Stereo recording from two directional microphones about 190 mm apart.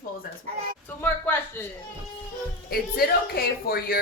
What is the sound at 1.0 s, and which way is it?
Speech, 10° left (ahead or behind).